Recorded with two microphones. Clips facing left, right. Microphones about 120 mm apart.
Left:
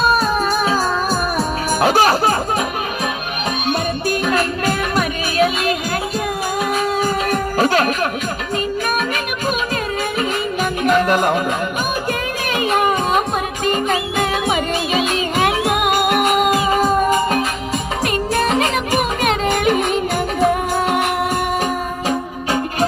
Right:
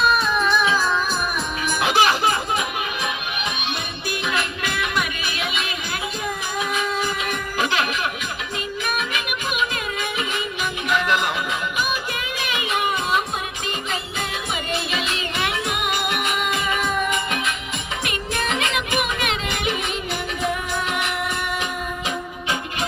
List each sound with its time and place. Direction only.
0.0 s music: 40° left (ahead or behind)
3.7 s music: 40° left (ahead or behind)
10.2 s music: 45° left (ahead or behind)
12.5 s music: 45° left (ahead or behind)